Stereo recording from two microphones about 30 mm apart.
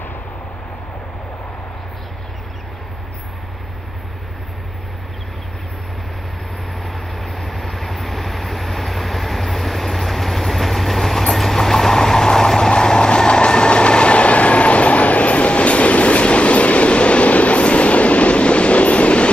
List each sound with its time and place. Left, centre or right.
6.8 s vehicle: centre; by 19.3 s left